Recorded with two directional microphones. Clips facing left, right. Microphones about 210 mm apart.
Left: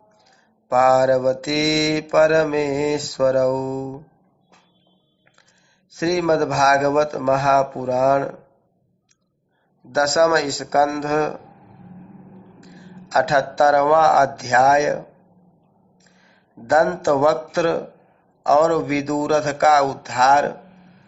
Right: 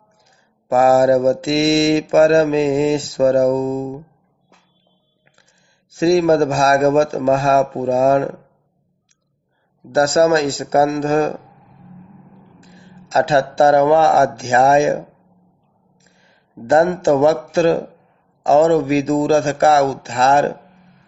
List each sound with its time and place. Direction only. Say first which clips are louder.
0.7 s mantra: right 3 dB; 30° right (ahead or behind)
5.9 s mantra: right 5 dB; 30° right (ahead or behind)
9.9 s mantra: right 3 dB; 30° right (ahead or behind)
12.5 s speech: left 2 dB; 25° right (ahead or behind)
16.6 s mantra: right 3 dB; 25° right (ahead or behind)